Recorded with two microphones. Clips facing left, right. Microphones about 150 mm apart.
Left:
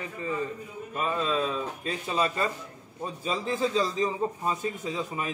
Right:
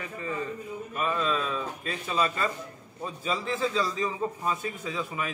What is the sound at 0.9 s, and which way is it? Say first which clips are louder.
A man's voice: left 1 dB; 30° left (ahead or behind).